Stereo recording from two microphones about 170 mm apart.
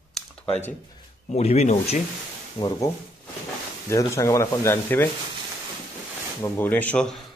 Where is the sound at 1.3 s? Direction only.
35° left (ahead or behind).